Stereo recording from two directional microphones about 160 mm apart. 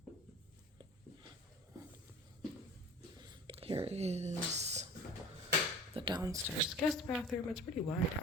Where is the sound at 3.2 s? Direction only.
30° right (ahead or behind).